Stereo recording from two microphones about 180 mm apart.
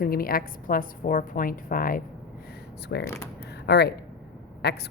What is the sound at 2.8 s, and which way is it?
Speech, 70° left (ahead or behind).